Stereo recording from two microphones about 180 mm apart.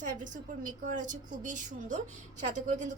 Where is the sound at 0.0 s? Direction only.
45° right (ahead or behind).